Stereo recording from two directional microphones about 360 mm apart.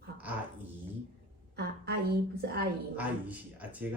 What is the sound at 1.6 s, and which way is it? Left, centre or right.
A woman's voice, right.